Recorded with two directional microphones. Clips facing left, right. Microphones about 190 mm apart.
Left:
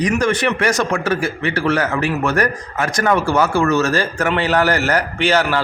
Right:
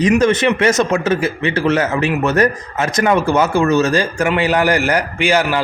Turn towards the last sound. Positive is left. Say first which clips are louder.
# right 1 dB
turn(degrees=-10)  # may be behind; listen again after turning